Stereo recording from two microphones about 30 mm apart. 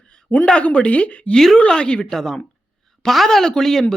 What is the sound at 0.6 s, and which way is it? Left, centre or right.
Speech, left.